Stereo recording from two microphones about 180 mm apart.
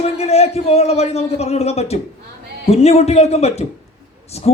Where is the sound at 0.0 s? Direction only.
35° left (ahead or behind).